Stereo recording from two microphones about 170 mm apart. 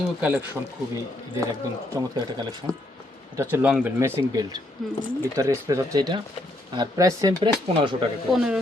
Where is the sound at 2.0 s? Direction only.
25° right (ahead or behind).